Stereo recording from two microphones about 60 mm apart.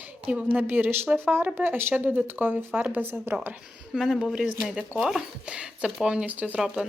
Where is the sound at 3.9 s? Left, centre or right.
Centre.